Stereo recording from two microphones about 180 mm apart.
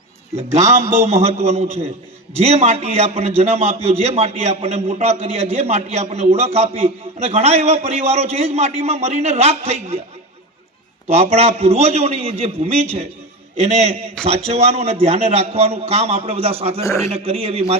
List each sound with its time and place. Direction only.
0.5 s a man's voice: 40° right (ahead or behind)
11.1 s a man's voice: 35° right (ahead or behind)
16.8 s a man's voice: 15° left (ahead or behind)
17.1 s a man's voice: 35° right (ahead or behind)